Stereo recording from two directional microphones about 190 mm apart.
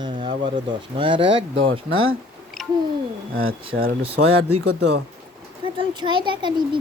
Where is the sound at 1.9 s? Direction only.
90° right.